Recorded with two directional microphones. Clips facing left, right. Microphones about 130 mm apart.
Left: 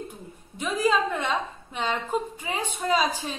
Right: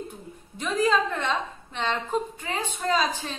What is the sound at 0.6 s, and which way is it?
A woman's voice, 10° left (ahead or behind).